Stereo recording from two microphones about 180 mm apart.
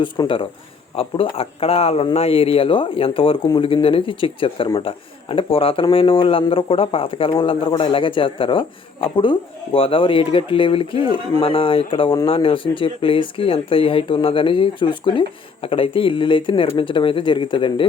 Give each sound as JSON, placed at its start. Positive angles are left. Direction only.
{"t": 0.0, "sound": "speech", "side_deg": 25}